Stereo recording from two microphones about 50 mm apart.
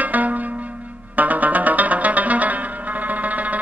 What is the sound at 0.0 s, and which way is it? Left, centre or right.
Music, right.